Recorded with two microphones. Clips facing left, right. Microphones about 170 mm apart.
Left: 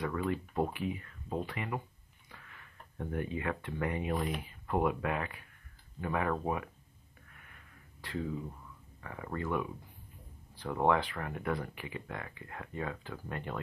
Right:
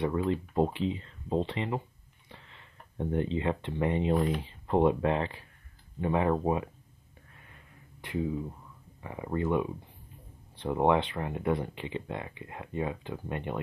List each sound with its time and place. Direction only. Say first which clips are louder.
0.0 s speech: right 5 dB; 25° right (ahead or behind)
7.3 s a sound: right 3 dB; 25° right (ahead or behind)
9.0 s speech: right 7 dB; 20° right (ahead or behind)